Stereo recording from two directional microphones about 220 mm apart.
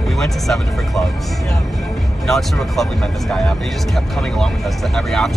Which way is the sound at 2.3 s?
Centre (ahead or behind).